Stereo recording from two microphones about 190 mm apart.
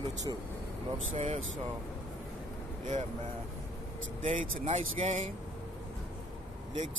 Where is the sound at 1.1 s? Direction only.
35° right (ahead or behind).